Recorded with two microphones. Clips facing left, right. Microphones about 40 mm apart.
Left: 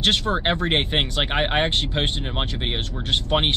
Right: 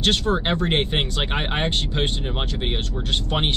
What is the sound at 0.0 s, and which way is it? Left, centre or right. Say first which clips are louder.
Speech: even; left.